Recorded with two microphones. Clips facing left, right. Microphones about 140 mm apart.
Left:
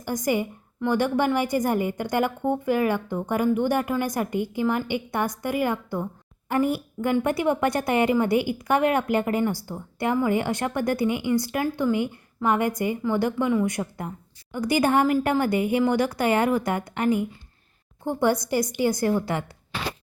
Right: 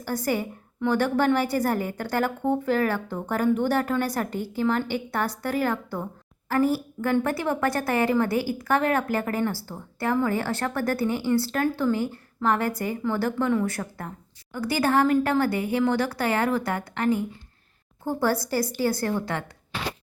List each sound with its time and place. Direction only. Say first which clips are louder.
0.0 s a woman's voice: left 2 dB; 15° left (ahead or behind)